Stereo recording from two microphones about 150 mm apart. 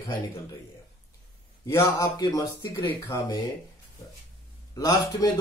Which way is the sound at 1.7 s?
20° left (ahead or behind).